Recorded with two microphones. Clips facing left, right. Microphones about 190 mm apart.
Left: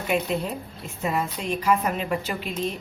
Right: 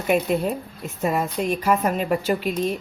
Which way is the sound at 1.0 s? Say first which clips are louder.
Right 4 dB; 45° right (ahead or behind).